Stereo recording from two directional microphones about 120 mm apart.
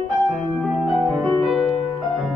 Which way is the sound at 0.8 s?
Centre (ahead or behind).